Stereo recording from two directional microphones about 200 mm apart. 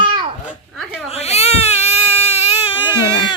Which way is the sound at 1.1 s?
30° left (ahead or behind).